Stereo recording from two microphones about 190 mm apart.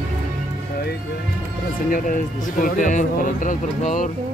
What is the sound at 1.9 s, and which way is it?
Speech, 45° left (ahead or behind).